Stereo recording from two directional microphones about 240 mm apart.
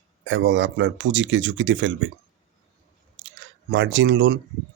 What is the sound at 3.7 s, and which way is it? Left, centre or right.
Speech, right.